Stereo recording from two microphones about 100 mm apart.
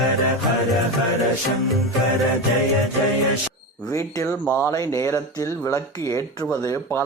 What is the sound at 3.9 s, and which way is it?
Speech, 30° left (ahead or behind).